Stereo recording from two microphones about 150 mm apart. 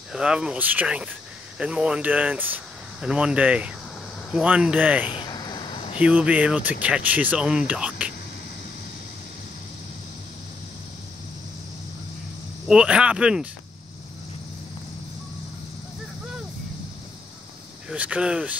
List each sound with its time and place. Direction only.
0.1 s speech: 5° right (ahead or behind)
5.1 s a sound: 30° left (ahead or behind)
5.9 s speech: 10° right (ahead or behind)
12.6 s speech: 5° right (ahead or behind)
17.8 s speech: 10° right (ahead or behind)